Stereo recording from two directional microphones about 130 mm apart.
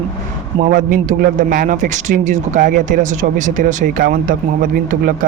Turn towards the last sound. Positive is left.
turn(degrees=-90)